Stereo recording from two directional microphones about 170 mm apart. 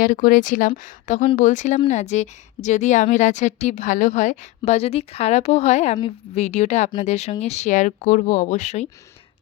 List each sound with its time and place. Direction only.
0.0 s a woman's voice: 55° left (ahead or behind)